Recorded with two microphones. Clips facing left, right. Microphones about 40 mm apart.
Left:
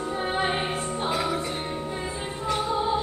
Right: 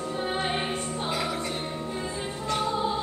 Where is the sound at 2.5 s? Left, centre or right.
Centre.